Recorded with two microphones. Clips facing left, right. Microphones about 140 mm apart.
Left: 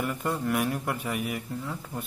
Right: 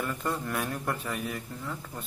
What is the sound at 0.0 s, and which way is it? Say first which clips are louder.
Speech: left 3 dB; 15° left (ahead or behind).